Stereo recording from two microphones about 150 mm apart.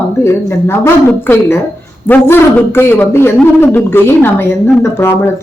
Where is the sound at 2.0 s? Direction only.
15° left (ahead or behind).